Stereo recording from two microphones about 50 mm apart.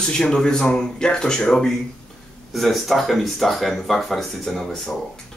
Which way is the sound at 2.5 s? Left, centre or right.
Centre.